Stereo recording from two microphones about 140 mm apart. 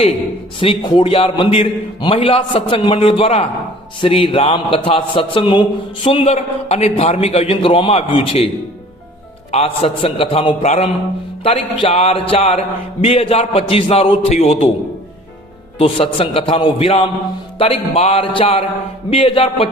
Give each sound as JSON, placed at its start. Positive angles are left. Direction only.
{"t": 0.6, "sound": "a man's voice", "side_deg": 40}
{"t": 9.5, "sound": "a man's voice", "side_deg": 45}
{"t": 15.8, "sound": "a man's voice", "side_deg": 40}